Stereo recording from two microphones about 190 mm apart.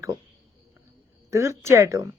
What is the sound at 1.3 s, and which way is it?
Speech, 15° right (ahead or behind).